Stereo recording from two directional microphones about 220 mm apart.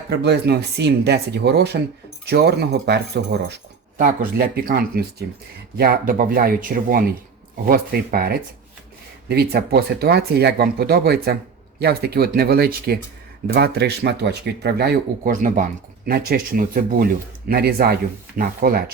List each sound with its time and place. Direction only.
0.1 s speech: 50° right (ahead or behind)